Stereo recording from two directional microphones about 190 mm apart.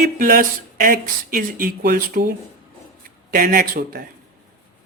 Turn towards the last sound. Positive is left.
turn(degrees=-50)  # may be behind; listen again after turning